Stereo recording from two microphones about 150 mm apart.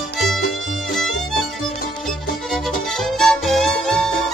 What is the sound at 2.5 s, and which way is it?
Music, centre (ahead or behind).